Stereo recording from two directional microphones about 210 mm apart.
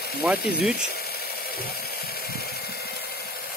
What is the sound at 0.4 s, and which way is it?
Speech, 50° left (ahead or behind).